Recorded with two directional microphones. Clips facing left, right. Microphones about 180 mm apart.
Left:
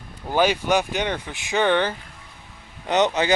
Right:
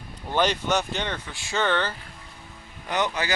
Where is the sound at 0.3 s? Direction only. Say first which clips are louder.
Left 4 dB; 10° left (ahead or behind).